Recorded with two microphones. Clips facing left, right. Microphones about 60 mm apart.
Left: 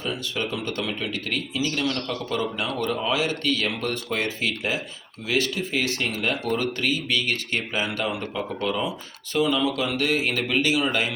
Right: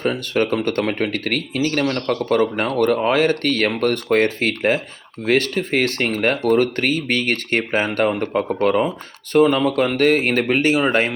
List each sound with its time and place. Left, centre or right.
0.0 s speech: right